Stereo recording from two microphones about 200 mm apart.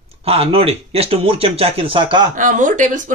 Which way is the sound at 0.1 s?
30° right (ahead or behind).